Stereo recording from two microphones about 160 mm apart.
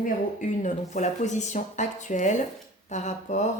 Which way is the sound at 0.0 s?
50° left (ahead or behind).